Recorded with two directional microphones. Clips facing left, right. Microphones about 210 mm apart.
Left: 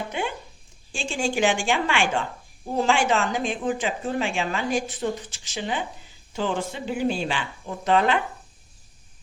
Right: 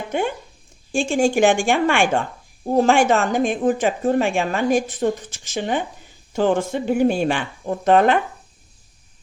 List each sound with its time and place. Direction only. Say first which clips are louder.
0.1 s speech: right 6 dB; 50° right (ahead or behind)